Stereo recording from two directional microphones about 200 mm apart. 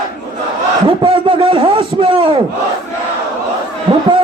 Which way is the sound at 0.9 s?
25° right (ahead or behind).